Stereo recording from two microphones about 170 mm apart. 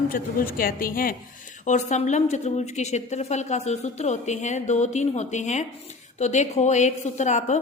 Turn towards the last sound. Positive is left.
turn(degrees=45)  # may be behind; listen again after turning